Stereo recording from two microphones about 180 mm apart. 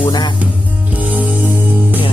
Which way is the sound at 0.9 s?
10° right (ahead or behind).